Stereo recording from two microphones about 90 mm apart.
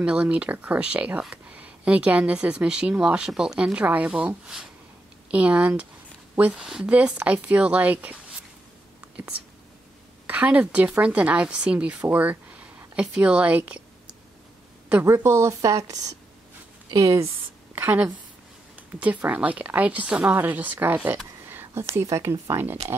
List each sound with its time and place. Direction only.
0.0 s a woman's voice: 10° right (ahead or behind)
10.2 s a woman's voice: 15° right (ahead or behind)
14.9 s a woman's voice: 25° right (ahead or behind)
15.6 s speech: 40° right (ahead or behind)
17.7 s a woman's voice: 20° right (ahead or behind)